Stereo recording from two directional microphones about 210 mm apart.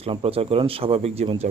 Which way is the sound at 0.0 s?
25° right (ahead or behind).